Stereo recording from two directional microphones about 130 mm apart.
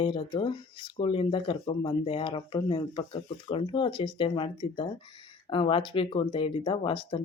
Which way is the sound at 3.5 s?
40° left (ahead or behind).